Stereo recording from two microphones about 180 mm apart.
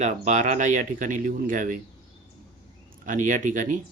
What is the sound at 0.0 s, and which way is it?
Speech, 40° right (ahead or behind).